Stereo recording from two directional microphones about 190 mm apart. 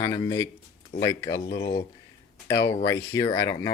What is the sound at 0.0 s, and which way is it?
Speech, 15° left (ahead or behind).